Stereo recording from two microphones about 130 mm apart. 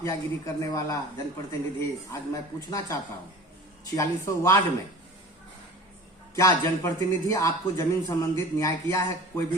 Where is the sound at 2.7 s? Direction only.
25° left (ahead or behind).